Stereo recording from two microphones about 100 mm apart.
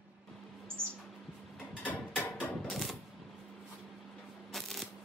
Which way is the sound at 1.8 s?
15° left (ahead or behind).